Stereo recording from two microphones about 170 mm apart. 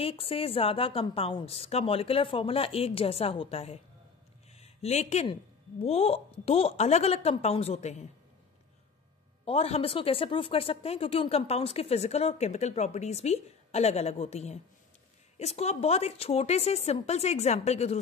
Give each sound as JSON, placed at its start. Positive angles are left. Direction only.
{"t": 0.0, "sound": "speech", "side_deg": 35}
{"t": 9.4, "sound": "speech", "side_deg": 35}